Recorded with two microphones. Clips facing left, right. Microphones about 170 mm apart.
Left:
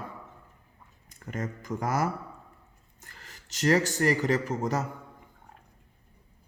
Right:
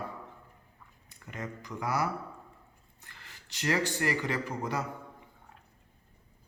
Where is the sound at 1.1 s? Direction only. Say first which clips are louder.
Left 5 dB; 45° left (ahead or behind).